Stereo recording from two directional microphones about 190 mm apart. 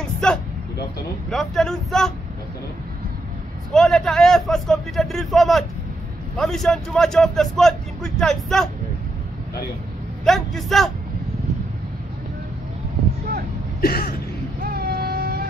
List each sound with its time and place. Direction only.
0.2 s a man's voice: 5° left (ahead or behind)
3.7 s a man's voice: centre (ahead or behind)
10.2 s a man's voice: centre (ahead or behind)
13.7 s a sound: 50° left (ahead or behind)
14.6 s vehicle: 50° right (ahead or behind)